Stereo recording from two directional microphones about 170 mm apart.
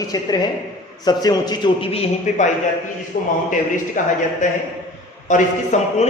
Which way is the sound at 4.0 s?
50° left (ahead or behind).